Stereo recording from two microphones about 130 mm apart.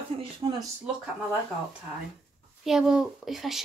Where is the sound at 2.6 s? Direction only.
5° right (ahead or behind).